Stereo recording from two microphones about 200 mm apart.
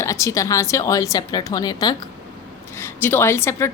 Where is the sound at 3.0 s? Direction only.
10° left (ahead or behind).